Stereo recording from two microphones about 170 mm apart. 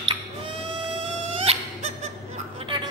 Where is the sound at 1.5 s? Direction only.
35° right (ahead or behind).